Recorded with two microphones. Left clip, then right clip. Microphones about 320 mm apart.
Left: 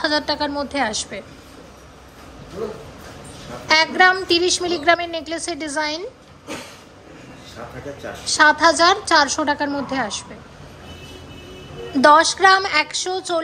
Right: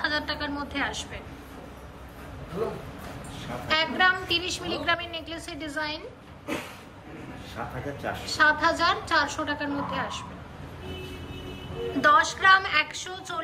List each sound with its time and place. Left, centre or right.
0.0 s a woman's voice: centre
3.6 s a woman's voice: centre
8.4 s a woman's voice: centre
12.0 s a woman's voice: centre